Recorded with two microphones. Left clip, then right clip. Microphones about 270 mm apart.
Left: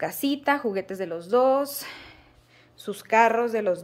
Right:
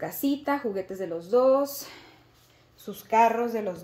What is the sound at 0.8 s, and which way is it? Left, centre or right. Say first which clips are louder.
Speech: left 2 dB; centre.